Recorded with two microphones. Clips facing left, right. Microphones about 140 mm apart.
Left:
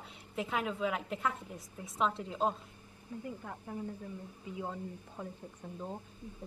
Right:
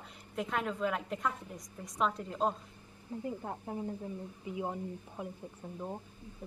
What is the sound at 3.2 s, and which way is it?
Speech, 30° right (ahead or behind).